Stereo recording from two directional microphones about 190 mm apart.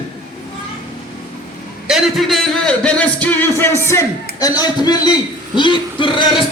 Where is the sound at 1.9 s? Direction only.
Centre (ahead or behind).